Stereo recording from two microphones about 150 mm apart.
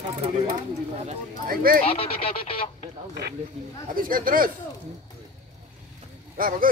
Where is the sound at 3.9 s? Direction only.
70° right (ahead or behind).